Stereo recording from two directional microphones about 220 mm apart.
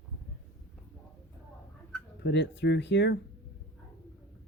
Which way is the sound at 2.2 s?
50° left (ahead or behind).